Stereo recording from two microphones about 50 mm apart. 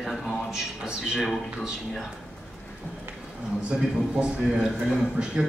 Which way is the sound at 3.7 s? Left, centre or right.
Right.